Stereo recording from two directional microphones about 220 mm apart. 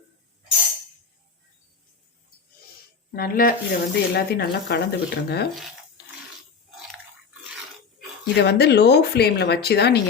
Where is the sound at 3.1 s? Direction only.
40° left (ahead or behind).